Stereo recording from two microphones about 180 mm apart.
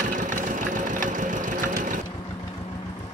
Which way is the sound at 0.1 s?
45° right (ahead or behind).